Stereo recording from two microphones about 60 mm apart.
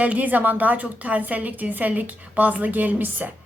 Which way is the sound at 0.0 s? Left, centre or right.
Right.